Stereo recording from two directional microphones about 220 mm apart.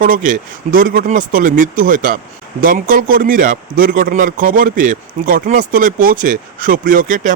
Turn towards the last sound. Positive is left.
turn(degrees=-35)  # may be behind; listen again after turning